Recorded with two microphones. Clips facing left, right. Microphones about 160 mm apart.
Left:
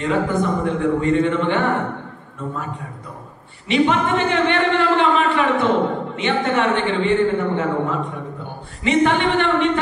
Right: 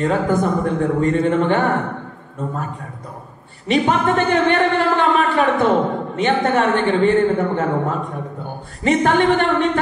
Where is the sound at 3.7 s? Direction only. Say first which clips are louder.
Right 1 dB; 45° right (ahead or behind).